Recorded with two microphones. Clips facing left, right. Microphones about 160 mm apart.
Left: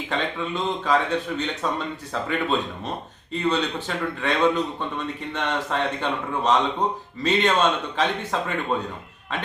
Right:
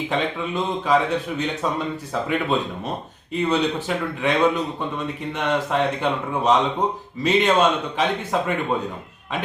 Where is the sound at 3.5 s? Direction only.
10° right (ahead or behind).